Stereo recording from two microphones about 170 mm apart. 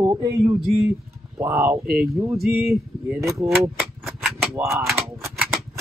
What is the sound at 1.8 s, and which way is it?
Speech, 65° right (ahead or behind).